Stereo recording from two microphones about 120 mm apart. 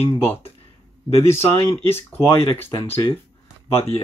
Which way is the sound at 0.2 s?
15° left (ahead or behind).